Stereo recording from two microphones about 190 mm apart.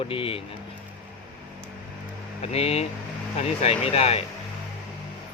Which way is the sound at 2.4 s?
30° left (ahead or behind).